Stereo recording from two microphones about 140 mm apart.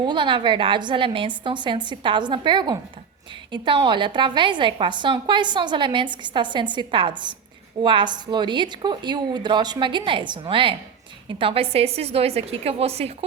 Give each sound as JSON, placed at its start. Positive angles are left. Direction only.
{"t": 0.0, "sound": "a woman's voice", "side_deg": -35}